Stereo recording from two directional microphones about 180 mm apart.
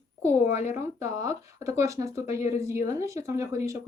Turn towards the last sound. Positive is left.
turn(degrees=-15)  # may be behind; listen again after turning